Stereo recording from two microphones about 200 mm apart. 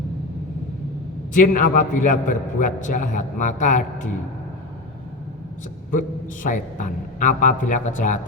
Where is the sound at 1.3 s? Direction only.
40° left (ahead or behind).